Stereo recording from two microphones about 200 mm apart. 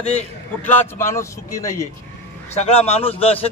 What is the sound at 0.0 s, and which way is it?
Speech, 35° left (ahead or behind).